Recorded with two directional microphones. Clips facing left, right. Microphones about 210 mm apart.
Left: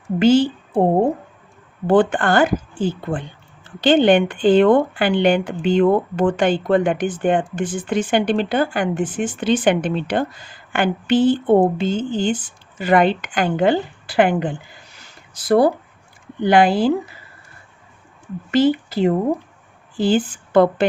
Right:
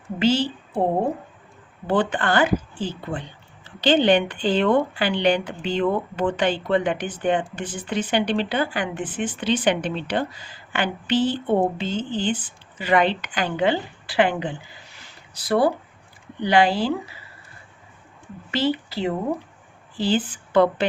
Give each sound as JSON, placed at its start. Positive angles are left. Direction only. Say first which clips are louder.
{"t": 0.2, "sound": "a woman's voice", "louder": "left 7 dB", "side_deg": 50}
{"t": 1.9, "sound": "speech", "louder": "left 6 dB", "side_deg": 50}
{"t": 18.5, "sound": "speech", "louder": "left 7 dB", "side_deg": 50}